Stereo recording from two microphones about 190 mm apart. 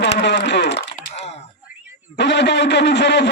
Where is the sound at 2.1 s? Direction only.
65° left (ahead or behind).